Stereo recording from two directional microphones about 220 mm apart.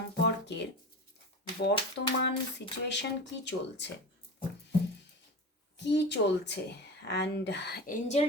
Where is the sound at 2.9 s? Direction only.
50° left (ahead or behind).